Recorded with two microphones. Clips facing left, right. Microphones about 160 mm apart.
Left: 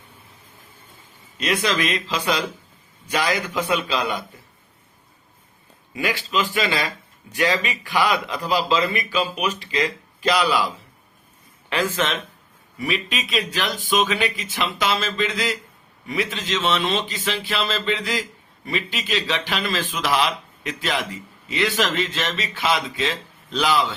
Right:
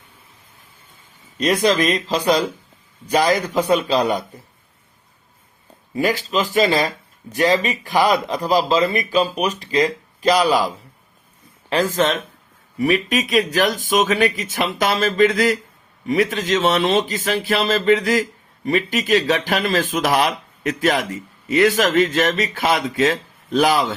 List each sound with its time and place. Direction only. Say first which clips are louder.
1.4 s speech: right 6 dB; 40° right (ahead or behind)
5.9 s speech: right 5 dB; 40° right (ahead or behind)
11.7 s speech: right 5 dB; 40° right (ahead or behind)